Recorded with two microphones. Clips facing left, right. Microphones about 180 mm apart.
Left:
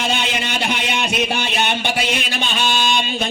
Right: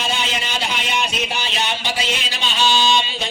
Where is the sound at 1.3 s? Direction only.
60° left (ahead or behind).